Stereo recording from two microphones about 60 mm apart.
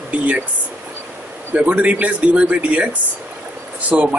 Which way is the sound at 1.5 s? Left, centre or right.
Right.